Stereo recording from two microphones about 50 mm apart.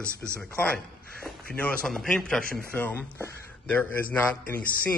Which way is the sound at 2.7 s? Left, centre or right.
Left.